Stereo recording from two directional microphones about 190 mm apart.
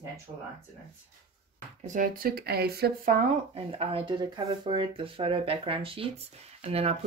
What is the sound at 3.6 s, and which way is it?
Speech, 30° right (ahead or behind).